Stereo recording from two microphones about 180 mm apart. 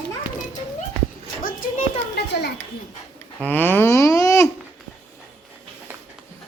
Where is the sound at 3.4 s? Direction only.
10° left (ahead or behind).